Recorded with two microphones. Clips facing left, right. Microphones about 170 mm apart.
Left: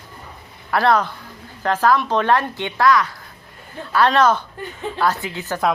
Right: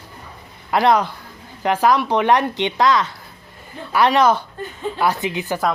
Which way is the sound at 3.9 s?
15° right (ahead or behind).